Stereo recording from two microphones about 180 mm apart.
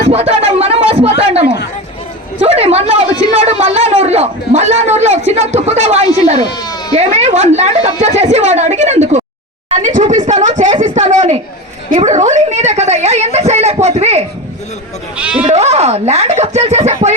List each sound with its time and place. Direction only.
0.1 s a sound: 35° right (ahead or behind)
2.4 s a woman's voice: 35° right (ahead or behind)
6.5 s speech: 20° left (ahead or behind)
6.9 s a woman's voice: 35° right (ahead or behind)
15.2 s speech: 5° right (ahead or behind)
15.4 s a woman's voice: 35° right (ahead or behind)